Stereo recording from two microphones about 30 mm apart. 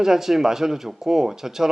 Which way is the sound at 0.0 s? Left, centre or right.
Centre.